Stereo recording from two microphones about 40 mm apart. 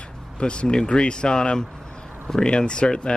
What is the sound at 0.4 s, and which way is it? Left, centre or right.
A man's voice, left.